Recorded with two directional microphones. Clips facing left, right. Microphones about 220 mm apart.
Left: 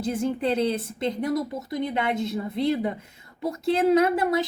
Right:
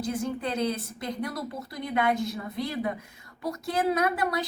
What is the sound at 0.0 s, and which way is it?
A woman's voice, 25° left (ahead or behind).